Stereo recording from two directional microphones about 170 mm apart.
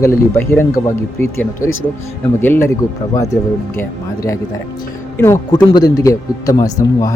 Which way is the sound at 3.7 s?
15° left (ahead or behind).